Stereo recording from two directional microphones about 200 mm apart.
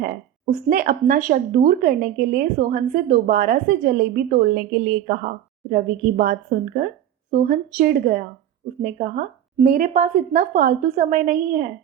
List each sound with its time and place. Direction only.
0.7 s speech: 45° right (ahead or behind)